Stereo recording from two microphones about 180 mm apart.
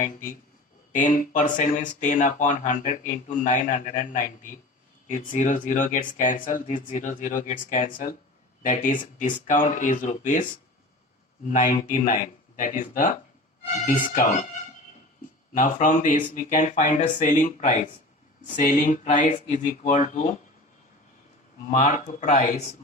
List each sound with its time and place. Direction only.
0.0 s speech: 50° left (ahead or behind)
11.4 s speech: 45° left (ahead or behind)
15.5 s speech: 45° left (ahead or behind)
21.8 s speech: 45° left (ahead or behind)